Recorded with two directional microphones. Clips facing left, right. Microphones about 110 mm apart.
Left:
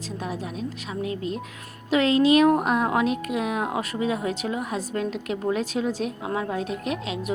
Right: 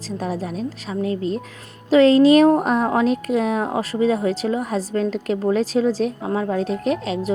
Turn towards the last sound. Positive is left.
turn(degrees=-35)  # may be behind; listen again after turning